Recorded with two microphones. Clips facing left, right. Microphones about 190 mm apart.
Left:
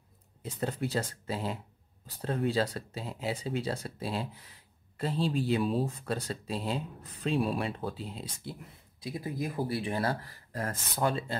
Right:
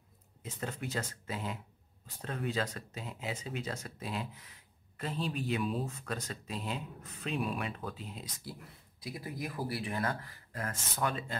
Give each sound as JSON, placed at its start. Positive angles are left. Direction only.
{"t": 0.4, "sound": "speech", "side_deg": 35}